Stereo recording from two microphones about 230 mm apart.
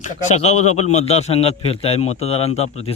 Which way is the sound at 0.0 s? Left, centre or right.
Left.